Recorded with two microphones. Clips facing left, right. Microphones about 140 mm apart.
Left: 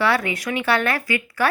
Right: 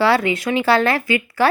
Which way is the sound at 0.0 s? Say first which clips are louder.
Right 5 dB; 25° right (ahead or behind).